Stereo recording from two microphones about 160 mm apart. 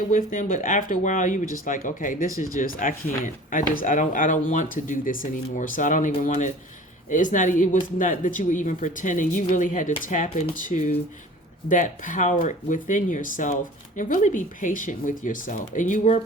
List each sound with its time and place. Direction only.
0.1 s speech: 55° left (ahead or behind)